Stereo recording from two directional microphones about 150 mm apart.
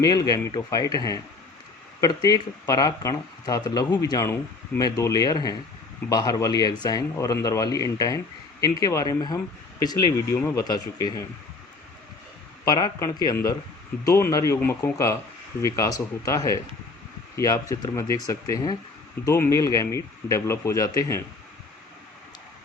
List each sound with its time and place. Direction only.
0.0 s speech: 25° left (ahead or behind)
12.6 s speech: 25° left (ahead or behind)